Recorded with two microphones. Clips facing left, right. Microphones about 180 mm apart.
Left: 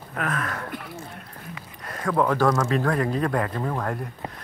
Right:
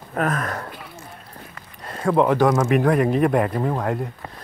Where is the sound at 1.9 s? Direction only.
25° right (ahead or behind).